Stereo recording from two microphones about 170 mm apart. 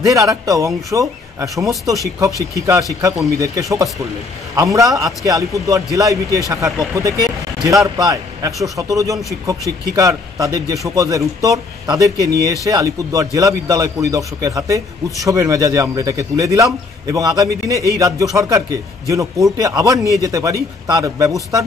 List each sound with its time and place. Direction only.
0.0 s speech: 20° right (ahead or behind)